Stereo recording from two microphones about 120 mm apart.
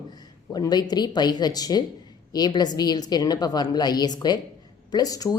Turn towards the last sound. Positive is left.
turn(degrees=30)  # may be behind; listen again after turning